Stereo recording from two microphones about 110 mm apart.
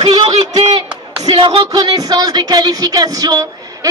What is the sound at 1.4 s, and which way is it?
Speech, 40° right (ahead or behind).